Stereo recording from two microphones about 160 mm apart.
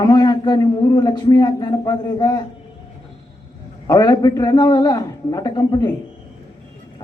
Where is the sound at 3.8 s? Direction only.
25° left (ahead or behind).